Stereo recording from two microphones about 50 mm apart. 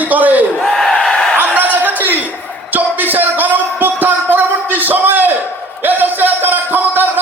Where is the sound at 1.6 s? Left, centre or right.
Right.